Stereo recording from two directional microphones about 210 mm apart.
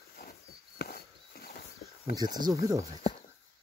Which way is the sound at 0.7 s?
45° left (ahead or behind).